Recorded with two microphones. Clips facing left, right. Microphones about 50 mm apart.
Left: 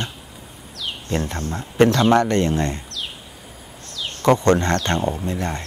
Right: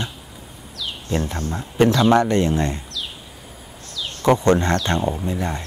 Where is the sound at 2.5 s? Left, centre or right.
Centre.